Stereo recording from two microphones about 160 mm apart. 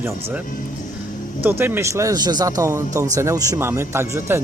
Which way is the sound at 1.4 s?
15° right (ahead or behind).